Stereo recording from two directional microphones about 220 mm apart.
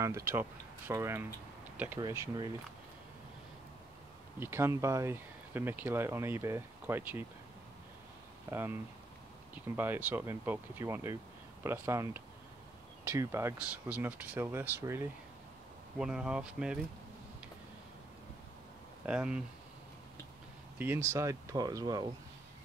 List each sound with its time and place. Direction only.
0.0 s speech: 15° right (ahead or behind)
4.4 s speech: 10° right (ahead or behind)
8.5 s speech: 10° right (ahead or behind)
9.8 s speech: 10° right (ahead or behind)
16.0 s speech: 5° right (ahead or behind)
19.0 s speech: 5° right (ahead or behind)
20.8 s speech: 10° right (ahead or behind)